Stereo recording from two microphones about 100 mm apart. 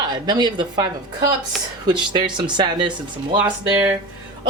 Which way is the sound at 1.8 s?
50° right (ahead or behind).